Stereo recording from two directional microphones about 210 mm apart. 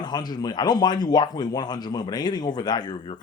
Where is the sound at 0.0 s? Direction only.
20° left (ahead or behind).